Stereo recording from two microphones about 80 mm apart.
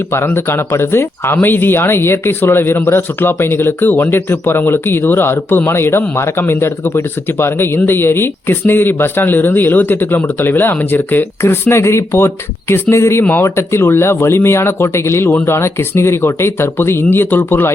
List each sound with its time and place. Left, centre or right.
0.3 s speech: left